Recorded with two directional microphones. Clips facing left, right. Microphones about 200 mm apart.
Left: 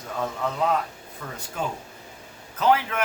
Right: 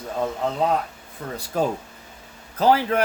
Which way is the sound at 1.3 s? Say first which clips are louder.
Right 8 dB; 35° right (ahead or behind).